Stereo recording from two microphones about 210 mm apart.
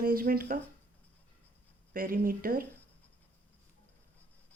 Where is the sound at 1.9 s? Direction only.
40° right (ahead or behind).